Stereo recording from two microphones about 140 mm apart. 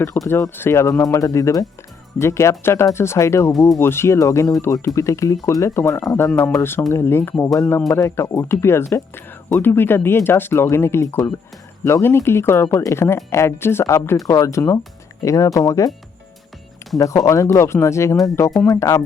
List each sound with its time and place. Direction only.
0.3 s speech: 15° left (ahead or behind)
3.5 s speech: centre (ahead or behind)
3.8 s speech: 15° left (ahead or behind)
17.0 s speech: 20° left (ahead or behind)